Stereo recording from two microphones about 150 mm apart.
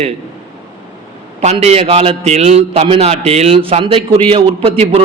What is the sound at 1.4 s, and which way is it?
A man's voice, 45° right (ahead or behind).